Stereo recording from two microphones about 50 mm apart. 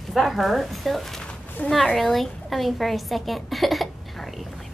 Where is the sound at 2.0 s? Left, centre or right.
Centre.